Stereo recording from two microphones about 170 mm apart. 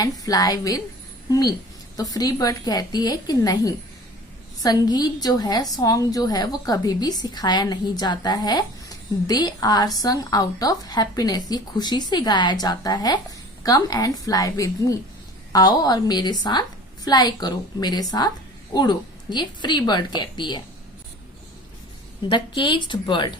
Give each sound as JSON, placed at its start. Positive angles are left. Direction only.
{"t": 0.0, "sound": "a woman's voice", "side_deg": 20}
{"t": 22.3, "sound": "a woman's voice", "side_deg": 30}